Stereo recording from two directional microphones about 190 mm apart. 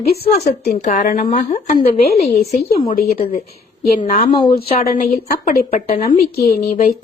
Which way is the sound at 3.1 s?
50° left (ahead or behind).